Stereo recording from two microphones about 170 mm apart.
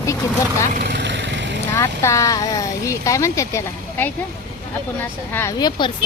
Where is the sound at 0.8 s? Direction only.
80° right.